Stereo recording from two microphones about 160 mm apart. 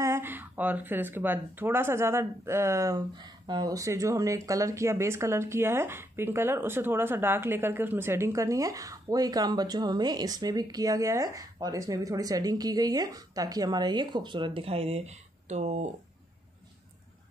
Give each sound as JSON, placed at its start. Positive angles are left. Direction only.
{"t": 0.0, "sound": "speech", "side_deg": -15}